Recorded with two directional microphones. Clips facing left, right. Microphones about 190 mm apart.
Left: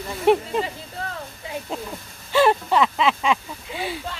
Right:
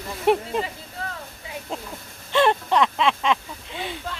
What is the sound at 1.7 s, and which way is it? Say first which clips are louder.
Speech: left 2 dB; centre (ahead or behind).